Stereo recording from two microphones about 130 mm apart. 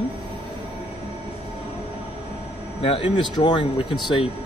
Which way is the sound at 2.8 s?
45° left (ahead or behind).